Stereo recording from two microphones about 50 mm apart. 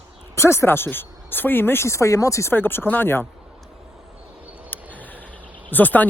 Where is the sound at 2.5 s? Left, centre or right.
Left.